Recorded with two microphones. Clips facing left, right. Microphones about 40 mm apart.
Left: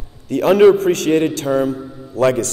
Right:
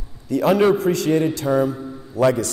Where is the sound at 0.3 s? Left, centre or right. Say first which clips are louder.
Left 5 dB; left.